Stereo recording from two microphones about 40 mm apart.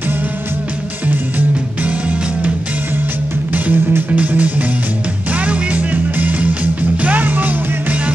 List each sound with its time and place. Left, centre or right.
1.8 s music: right
3.5 s music: right
4.1 s music: right